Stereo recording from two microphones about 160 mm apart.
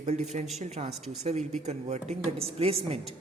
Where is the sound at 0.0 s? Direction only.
45° right (ahead or behind).